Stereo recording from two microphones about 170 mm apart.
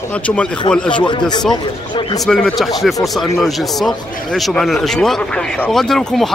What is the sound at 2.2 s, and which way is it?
Speech, 5° left (ahead or behind).